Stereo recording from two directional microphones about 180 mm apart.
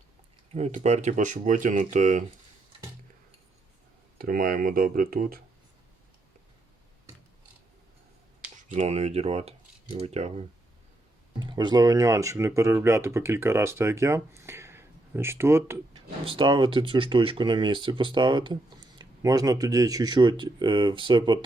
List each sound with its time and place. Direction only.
0.5 s speech: 40° right (ahead or behind)
4.2 s speech: 50° right (ahead or behind)
8.7 s speech: 35° right (ahead or behind)
11.3 s speech: 25° right (ahead or behind)
15.9 s speech: 30° right (ahead or behind)